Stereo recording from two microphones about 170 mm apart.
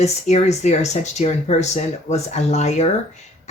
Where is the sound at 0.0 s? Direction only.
40° left (ahead or behind).